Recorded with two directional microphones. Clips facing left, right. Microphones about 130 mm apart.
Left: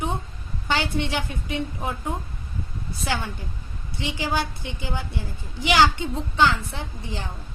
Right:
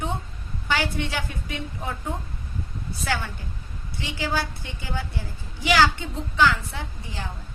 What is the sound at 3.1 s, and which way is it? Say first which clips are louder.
A woman's voice: left 1 dB; 20° left (ahead or behind).